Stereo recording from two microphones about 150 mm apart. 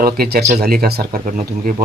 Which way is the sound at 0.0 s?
90° right.